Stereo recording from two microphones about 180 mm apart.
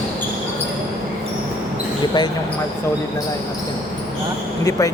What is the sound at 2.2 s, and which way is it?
Speech, 25° left (ahead or behind).